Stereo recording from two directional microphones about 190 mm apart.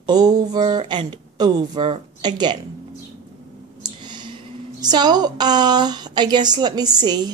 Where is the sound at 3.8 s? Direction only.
25° right (ahead or behind).